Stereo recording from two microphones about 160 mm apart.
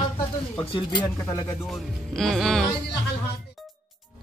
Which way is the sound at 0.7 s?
30° left (ahead or behind).